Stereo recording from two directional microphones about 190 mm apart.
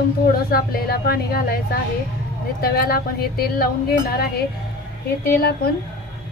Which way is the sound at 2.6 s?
55° left (ahead or behind).